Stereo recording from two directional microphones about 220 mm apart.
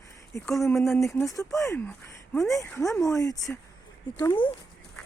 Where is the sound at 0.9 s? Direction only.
15° left (ahead or behind).